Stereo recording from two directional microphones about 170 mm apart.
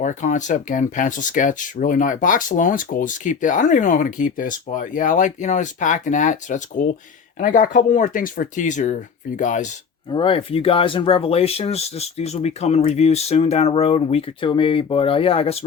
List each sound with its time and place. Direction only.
0.0 s speech: 45° left (ahead or behind)
10.1 s speech: 30° left (ahead or behind)